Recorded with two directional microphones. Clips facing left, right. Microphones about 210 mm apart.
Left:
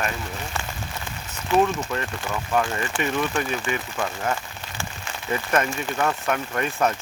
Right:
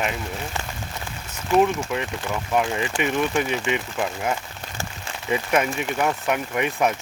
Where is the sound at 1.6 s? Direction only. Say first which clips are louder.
Right 2 dB; 10° right (ahead or behind).